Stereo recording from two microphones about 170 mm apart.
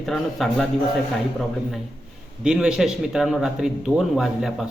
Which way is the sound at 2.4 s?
5° right (ahead or behind).